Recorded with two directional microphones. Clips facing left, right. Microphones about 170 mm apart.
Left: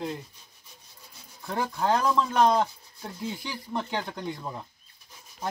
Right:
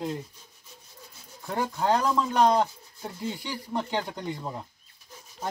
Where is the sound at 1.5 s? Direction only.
5° right (ahead or behind).